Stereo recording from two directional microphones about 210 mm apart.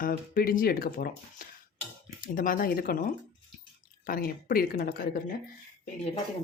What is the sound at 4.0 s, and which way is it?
Speech, 45° left (ahead or behind).